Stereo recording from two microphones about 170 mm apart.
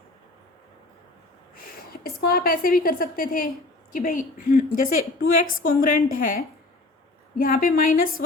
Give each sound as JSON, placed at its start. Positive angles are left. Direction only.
{"t": 1.5, "sound": "a woman's voice", "side_deg": 60}
{"t": 7.3, "sound": "a woman's voice", "side_deg": 60}